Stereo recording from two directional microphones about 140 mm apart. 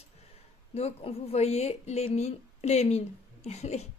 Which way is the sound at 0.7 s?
50° left (ahead or behind).